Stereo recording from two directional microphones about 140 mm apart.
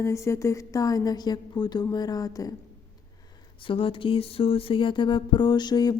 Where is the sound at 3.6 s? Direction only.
40° left (ahead or behind).